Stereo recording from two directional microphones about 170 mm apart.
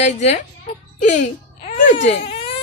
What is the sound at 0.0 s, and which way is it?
Speech, 40° left (ahead or behind).